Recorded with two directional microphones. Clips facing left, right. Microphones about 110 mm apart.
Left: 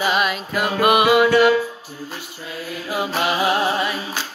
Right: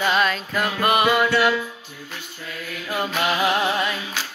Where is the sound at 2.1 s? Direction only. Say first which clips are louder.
Right 1 dB; 30° left (ahead or behind).